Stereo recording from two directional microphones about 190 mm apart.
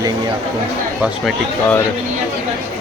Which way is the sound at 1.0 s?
Centre (ahead or behind).